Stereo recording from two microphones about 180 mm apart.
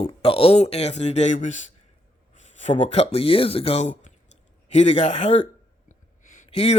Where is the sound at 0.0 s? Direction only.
30° left (ahead or behind).